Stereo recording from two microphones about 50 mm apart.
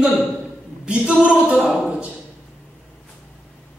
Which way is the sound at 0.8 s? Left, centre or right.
Centre.